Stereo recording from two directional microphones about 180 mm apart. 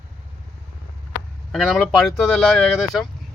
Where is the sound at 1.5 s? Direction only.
Centre (ahead or behind).